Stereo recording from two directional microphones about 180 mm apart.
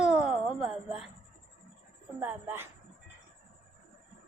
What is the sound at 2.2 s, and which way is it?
Speech, 10° right (ahead or behind).